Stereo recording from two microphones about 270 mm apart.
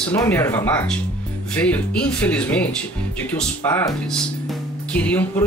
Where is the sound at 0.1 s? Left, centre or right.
Centre.